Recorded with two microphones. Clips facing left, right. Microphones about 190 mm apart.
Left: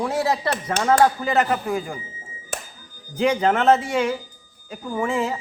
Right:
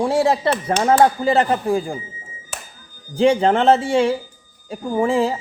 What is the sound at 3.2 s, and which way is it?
Speech, 30° right (ahead or behind).